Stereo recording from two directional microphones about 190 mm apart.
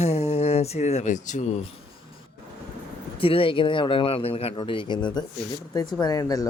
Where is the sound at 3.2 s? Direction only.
30° left (ahead or behind).